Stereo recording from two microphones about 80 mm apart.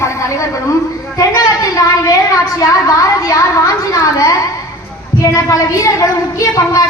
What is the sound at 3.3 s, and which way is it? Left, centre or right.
Speech, left.